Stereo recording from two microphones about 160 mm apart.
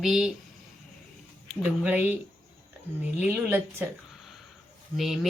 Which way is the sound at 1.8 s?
10° right (ahead or behind).